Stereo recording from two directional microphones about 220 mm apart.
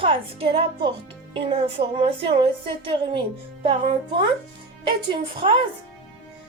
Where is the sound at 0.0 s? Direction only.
25° right (ahead or behind).